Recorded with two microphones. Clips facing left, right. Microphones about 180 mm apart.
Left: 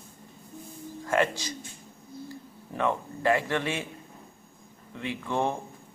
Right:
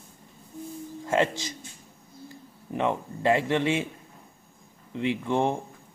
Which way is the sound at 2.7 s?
20° right (ahead or behind).